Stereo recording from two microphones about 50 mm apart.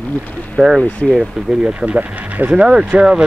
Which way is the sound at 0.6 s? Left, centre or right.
Centre.